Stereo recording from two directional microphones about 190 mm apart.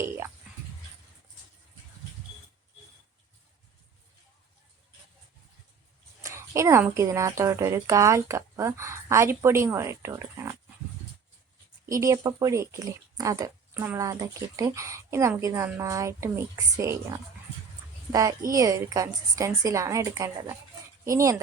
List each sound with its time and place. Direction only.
6.2 s speech: 15° right (ahead or behind)
11.9 s speech: 15° right (ahead or behind)